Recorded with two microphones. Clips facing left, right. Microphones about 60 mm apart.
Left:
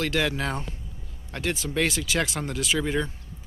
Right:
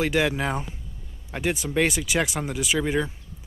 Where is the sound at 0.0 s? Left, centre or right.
Centre.